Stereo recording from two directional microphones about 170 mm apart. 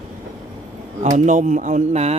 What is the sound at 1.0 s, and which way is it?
Speech, 45° right (ahead or behind).